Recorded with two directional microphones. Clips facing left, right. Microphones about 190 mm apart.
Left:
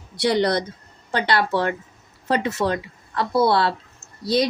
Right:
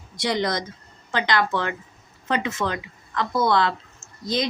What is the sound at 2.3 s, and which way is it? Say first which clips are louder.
Speech: left 4 dB; 35° left (ahead or behind).